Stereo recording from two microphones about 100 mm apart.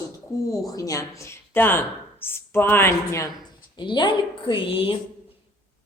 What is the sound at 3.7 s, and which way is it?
A woman's voice, 50° left (ahead or behind).